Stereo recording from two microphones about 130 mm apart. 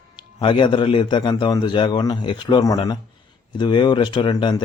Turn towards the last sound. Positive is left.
turn(degrees=35)  # may be behind; listen again after turning